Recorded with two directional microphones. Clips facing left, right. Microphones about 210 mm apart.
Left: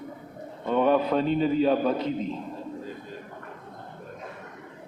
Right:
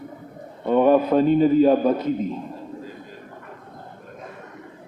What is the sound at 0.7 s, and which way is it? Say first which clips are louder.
A man's voice: right 6 dB; 45° right (ahead or behind).